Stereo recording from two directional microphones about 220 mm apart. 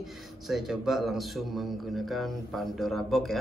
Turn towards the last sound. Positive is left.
turn(degrees=0)  # may be behind; listen again after turning